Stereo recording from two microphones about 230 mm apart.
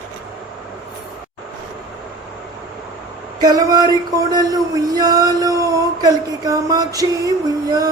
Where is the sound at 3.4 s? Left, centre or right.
Centre.